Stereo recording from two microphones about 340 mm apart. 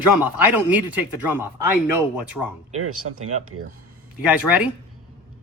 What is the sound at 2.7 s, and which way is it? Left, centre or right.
Speech, right.